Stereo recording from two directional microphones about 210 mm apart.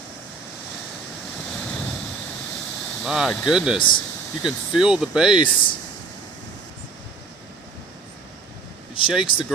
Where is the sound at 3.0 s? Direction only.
Centre (ahead or behind).